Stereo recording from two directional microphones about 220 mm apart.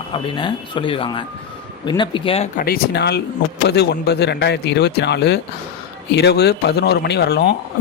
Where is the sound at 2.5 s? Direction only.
45° left (ahead or behind).